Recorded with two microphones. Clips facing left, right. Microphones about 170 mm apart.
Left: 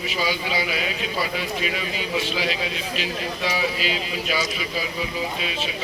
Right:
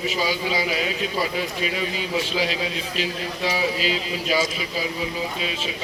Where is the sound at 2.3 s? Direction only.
35° right (ahead or behind).